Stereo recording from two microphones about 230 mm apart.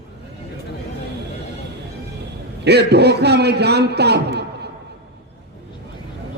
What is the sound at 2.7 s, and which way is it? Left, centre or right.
A man's voice, right.